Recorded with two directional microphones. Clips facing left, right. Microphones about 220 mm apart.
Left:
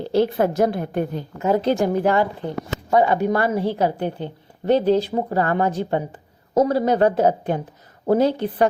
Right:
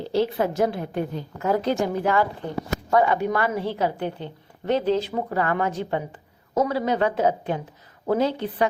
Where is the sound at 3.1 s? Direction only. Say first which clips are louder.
Left 4 dB; 35° left (ahead or behind).